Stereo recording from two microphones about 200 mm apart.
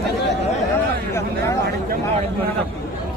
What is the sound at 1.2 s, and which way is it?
Speech, 15° left (ahead or behind).